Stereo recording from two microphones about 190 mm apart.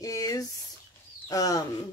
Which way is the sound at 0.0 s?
15° left (ahead or behind).